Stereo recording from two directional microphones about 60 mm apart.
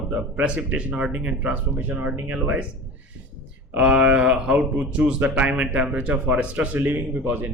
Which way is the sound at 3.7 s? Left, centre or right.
Centre.